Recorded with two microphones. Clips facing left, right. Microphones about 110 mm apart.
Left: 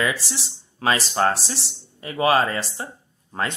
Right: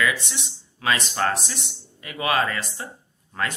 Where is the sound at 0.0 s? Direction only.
30° left (ahead or behind).